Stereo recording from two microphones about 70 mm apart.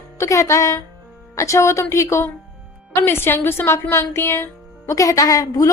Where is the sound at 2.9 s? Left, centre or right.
Left.